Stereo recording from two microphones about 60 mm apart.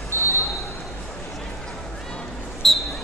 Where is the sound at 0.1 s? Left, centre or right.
Right.